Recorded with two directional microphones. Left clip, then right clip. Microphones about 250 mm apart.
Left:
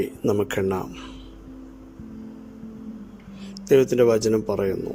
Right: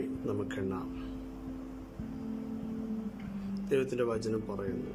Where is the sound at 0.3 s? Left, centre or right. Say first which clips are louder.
Left 15 dB; left.